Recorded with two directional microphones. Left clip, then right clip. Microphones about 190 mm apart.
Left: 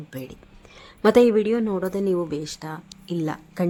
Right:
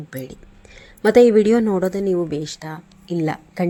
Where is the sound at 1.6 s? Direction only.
10° right (ahead or behind).